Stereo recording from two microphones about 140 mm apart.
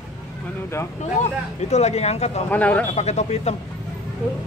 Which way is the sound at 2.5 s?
10° left (ahead or behind).